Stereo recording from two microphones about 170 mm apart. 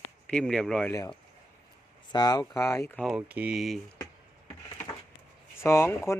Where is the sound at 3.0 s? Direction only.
5° right (ahead or behind).